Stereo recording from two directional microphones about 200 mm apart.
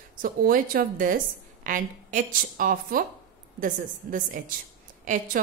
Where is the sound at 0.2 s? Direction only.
45° right (ahead or behind).